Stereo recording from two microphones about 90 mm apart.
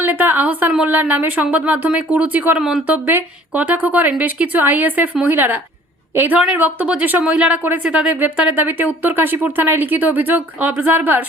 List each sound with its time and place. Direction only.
0.0 s a woman's voice: 20° right (ahead or behind)
2.6 s speech: 5° right (ahead or behind)
2.8 s a woman's voice: 20° right (ahead or behind)
8.5 s a woman's voice: 20° right (ahead or behind)